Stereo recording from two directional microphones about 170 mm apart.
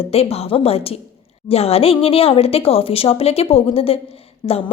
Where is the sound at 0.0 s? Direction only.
35° left (ahead or behind).